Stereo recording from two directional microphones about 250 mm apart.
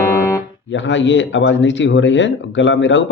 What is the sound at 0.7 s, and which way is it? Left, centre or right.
Speech, left.